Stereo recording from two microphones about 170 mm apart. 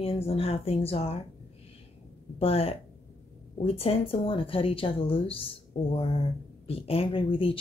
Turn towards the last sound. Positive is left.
turn(degrees=30)  # may be behind; listen again after turning